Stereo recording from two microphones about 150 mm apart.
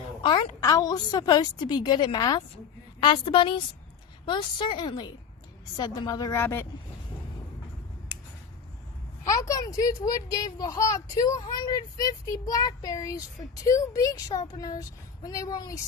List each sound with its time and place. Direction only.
0.2 s a woman's voice: 30° left (ahead or behind)
9.2 s speech: 20° left (ahead or behind)